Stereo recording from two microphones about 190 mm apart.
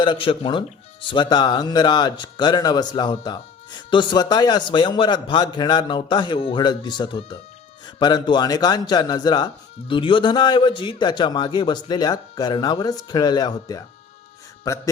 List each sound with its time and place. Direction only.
0.0 s speech: 25° left (ahead or behind)